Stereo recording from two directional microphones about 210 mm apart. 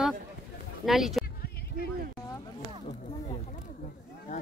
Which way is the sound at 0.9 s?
Centre (ahead or behind).